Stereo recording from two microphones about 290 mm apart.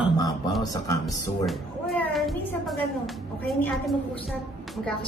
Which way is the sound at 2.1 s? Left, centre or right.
Centre.